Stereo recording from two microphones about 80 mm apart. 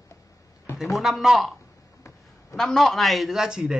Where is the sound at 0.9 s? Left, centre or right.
Centre.